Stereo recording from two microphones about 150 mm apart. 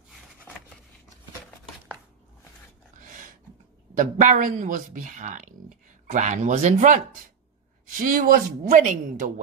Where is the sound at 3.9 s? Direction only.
60° right (ahead or behind).